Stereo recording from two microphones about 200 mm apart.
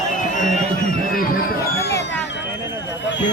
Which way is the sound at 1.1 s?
45° left (ahead or behind).